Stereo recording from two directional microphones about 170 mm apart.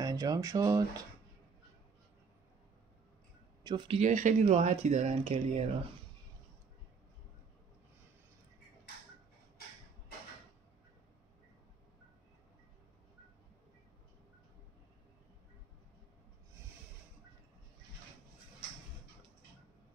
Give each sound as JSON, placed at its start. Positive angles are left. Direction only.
{"t": 0.0, "sound": "speech", "side_deg": -20}
{"t": 3.6, "sound": "speech", "side_deg": -30}